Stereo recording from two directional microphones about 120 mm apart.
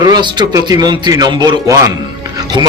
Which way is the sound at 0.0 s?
35° right (ahead or behind).